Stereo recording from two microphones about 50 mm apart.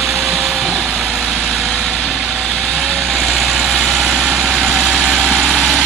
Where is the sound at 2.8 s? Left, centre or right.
Centre.